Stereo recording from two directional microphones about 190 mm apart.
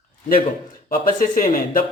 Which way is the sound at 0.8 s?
45° left (ahead or behind).